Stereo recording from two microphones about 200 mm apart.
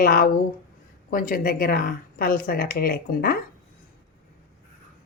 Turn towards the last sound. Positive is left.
turn(degrees=50)  # may be behind; listen again after turning